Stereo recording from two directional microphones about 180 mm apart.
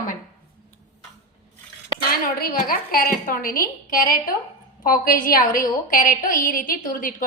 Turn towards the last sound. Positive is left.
turn(degrees=50)  # may be behind; listen again after turning